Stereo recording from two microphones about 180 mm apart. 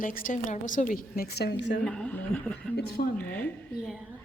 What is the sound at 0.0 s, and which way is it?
A woman's voice, 45° left (ahead or behind).